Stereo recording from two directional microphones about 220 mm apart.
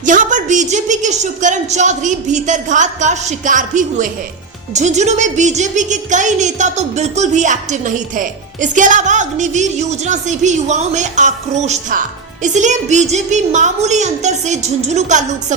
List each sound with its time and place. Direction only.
0.0 s speech: 35° right (ahead or behind)